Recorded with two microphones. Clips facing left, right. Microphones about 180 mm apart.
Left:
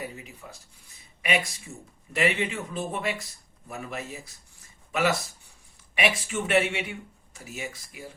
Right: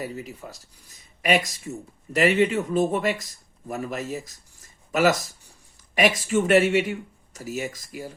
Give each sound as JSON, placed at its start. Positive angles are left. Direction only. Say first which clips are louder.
{"t": 0.0, "sound": "a man's voice", "louder": "right 6 dB", "side_deg": -40}